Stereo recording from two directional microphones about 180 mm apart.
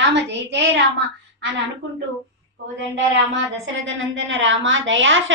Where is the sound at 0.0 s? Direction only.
75° right (ahead or behind).